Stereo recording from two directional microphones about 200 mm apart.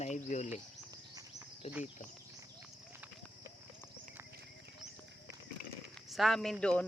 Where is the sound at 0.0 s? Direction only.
35° left (ahead or behind).